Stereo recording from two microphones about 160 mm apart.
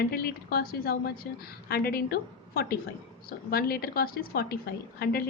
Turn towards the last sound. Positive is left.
turn(degrees=70)  # may be behind; listen again after turning